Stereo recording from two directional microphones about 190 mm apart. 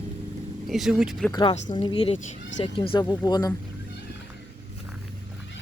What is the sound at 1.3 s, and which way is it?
Speech, 25° left (ahead or behind).